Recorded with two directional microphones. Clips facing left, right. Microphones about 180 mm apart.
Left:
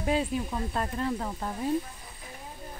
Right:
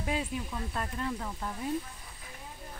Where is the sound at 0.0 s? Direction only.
30° left (ahead or behind).